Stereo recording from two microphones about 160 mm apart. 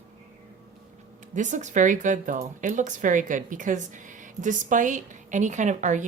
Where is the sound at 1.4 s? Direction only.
50° right (ahead or behind).